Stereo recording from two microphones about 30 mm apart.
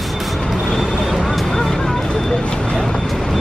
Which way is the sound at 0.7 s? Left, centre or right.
Centre.